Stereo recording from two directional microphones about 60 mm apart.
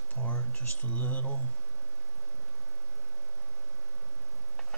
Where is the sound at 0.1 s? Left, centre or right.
Left.